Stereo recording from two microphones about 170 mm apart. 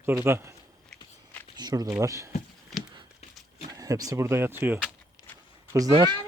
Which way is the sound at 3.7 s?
20° right (ahead or behind).